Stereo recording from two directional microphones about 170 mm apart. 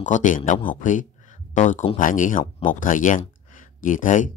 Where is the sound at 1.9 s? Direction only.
50° left (ahead or behind).